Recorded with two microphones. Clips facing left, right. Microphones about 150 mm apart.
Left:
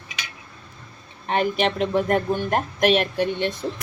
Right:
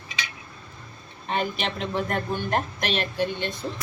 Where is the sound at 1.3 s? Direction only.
60° left (ahead or behind).